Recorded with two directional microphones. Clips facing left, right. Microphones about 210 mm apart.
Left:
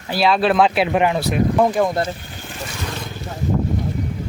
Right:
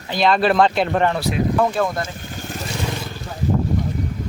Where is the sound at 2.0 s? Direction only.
45° right (ahead or behind).